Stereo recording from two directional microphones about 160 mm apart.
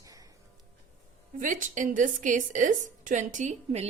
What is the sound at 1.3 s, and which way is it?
A woman's voice, 55° right (ahead or behind).